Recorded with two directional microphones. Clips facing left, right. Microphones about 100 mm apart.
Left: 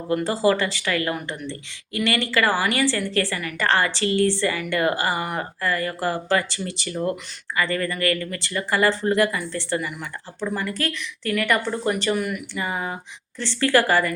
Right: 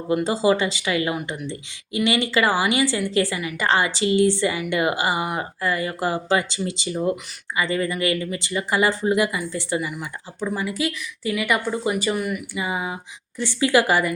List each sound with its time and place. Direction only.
0.1 s speech: 15° right (ahead or behind)